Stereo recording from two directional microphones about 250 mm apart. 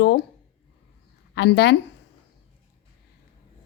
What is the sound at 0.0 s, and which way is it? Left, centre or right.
Speech, left.